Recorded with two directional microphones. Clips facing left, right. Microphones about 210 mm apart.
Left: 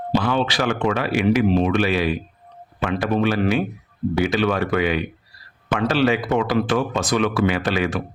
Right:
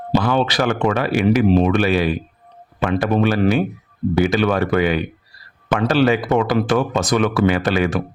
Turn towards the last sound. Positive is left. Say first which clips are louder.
# right 4 dB
turn(degrees=-45)  # may be behind; listen again after turning